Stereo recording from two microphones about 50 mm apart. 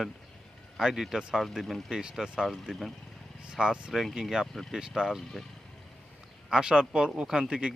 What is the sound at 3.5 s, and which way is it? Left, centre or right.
Speech, centre.